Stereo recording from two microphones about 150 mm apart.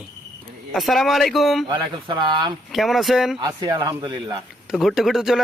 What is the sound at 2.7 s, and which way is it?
Speech, centre (ahead or behind).